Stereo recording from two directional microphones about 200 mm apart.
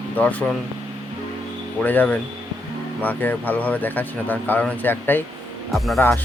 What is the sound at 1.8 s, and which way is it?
Speech, 10° left (ahead or behind).